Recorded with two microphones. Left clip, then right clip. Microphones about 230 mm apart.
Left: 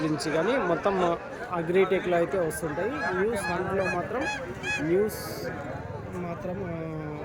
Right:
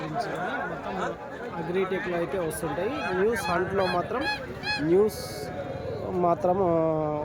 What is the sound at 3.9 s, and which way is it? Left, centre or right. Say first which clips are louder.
Speech: right 2 dB; right.